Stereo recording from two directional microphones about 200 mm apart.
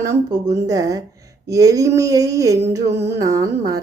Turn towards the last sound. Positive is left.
turn(degrees=-15)  # may be behind; listen again after turning